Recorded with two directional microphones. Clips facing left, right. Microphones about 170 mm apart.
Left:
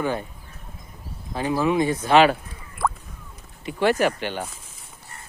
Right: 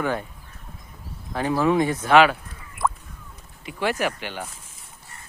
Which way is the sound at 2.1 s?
35° left (ahead or behind).